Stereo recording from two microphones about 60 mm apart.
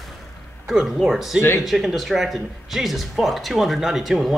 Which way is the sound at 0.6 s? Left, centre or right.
Centre.